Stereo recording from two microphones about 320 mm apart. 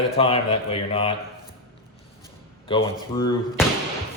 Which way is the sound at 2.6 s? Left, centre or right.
Centre.